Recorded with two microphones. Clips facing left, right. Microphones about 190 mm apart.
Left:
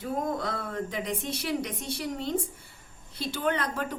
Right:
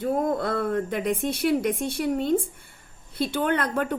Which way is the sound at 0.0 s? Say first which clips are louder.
Right 6 dB; 55° right (ahead or behind).